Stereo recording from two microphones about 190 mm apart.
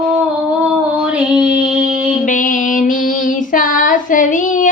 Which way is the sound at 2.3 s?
45° left (ahead or behind).